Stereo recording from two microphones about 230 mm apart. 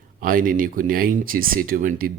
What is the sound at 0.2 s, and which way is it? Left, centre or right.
Speech, right.